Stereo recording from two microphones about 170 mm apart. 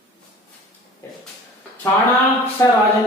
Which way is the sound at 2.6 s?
15° left (ahead or behind).